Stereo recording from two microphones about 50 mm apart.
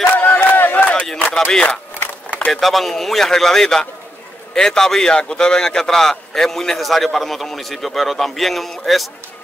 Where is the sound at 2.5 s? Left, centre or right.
Centre.